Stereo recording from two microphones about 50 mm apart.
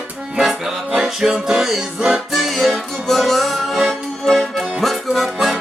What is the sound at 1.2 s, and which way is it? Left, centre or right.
Music, centre.